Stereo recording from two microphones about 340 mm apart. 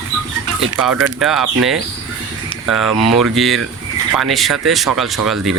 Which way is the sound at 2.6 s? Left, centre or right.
Centre.